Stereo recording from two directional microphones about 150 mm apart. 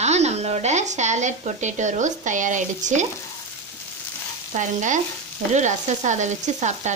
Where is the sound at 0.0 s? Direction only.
45° right (ahead or behind).